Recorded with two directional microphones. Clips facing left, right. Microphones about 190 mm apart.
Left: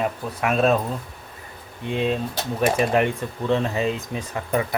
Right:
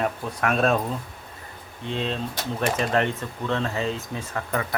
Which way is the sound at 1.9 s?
10° left (ahead or behind).